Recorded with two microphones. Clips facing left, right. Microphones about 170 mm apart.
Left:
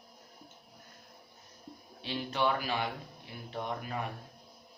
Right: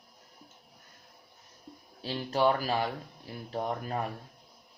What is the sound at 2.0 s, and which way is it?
Speech, 40° right (ahead or behind).